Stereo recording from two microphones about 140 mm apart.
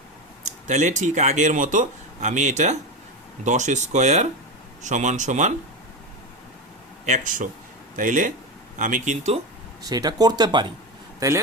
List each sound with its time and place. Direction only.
0.4 s speech: 60° right (ahead or behind)
7.0 s speech: 65° right (ahead or behind)
9.9 s speech: 30° right (ahead or behind)
11.2 s speech: 20° right (ahead or behind)